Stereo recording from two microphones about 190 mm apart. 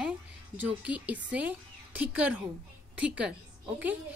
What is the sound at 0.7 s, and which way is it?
Speech, 10° right (ahead or behind).